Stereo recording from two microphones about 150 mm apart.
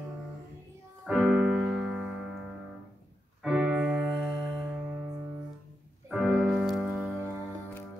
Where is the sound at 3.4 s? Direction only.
5° right (ahead or behind).